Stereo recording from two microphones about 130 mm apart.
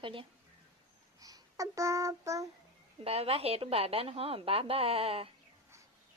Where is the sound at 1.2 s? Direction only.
25° right (ahead or behind).